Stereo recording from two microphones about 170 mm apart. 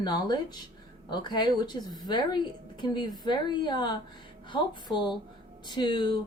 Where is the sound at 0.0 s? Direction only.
25° left (ahead or behind).